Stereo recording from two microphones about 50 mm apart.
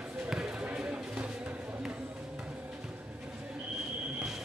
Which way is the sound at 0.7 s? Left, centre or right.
Right.